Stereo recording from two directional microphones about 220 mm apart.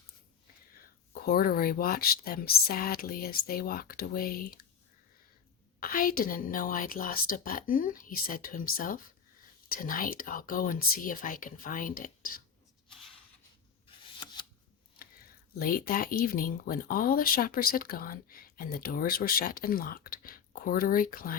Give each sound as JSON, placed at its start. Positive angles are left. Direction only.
{"t": 0.8, "sound": "speech", "side_deg": 45}
{"t": 5.8, "sound": "speech", "side_deg": 40}
{"t": 13.8, "sound": "a sound", "side_deg": 20}
{"t": 15.5, "sound": "speech", "side_deg": 40}